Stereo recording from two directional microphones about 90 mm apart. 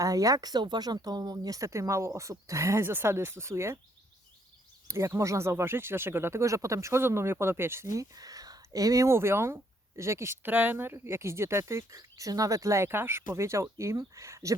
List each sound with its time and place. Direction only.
0.0 s speech: 40° right (ahead or behind)
4.9 s speech: 35° right (ahead or behind)
10.4 s speech: 20° right (ahead or behind)